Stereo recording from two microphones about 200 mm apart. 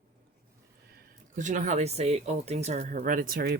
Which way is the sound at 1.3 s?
40° right (ahead or behind).